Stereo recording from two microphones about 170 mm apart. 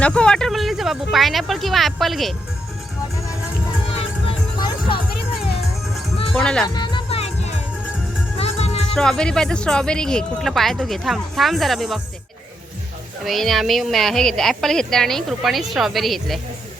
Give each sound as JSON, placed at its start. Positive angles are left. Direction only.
{"t": 0.0, "sound": "speech", "side_deg": 5}
{"t": 3.9, "sound": "music", "side_deg": 30}
{"t": 6.3, "sound": "speech", "side_deg": 5}
{"t": 6.7, "sound": "music", "side_deg": 25}
{"t": 9.0, "sound": "speech", "side_deg": 5}
{"t": 13.2, "sound": "speech", "side_deg": 0}